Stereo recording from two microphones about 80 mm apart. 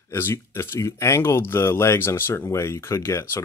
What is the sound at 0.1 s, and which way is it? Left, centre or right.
Speech, left.